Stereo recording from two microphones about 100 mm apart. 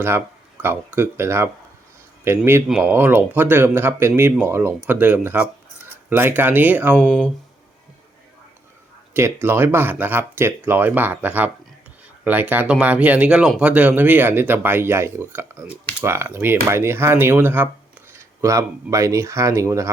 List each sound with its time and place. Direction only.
0.0 s speech: 20° right (ahead or behind)
2.6 s speech: 5° right (ahead or behind)
2.9 s speech: 20° right (ahead or behind)
9.1 s speech: 25° right (ahead or behind)
18.1 s speech: 30° right (ahead or behind)